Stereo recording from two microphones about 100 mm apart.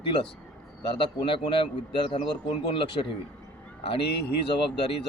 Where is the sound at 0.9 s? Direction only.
60° left (ahead or behind).